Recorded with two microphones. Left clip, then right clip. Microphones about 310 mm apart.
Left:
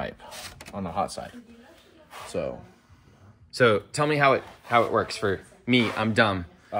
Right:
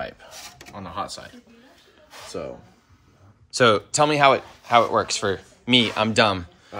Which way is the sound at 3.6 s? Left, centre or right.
Centre.